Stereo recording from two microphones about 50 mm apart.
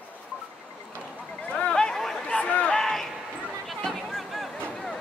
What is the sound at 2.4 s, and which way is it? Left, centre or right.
Crowd, left.